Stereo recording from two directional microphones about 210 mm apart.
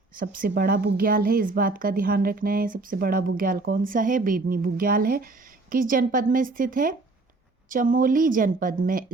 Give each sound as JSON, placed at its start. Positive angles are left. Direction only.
{"t": 0.3, "sound": "a woman's voice", "side_deg": -45}